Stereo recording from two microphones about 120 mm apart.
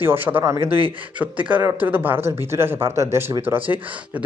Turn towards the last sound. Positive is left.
turn(degrees=-15)  # may be behind; listen again after turning